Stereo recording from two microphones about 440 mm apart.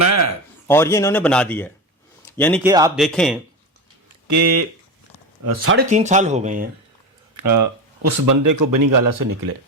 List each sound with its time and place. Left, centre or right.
0.0 s a sound: right
0.7 s speech: centre
4.3 s speech: right
5.9 s speech: centre
7.3 s speech: right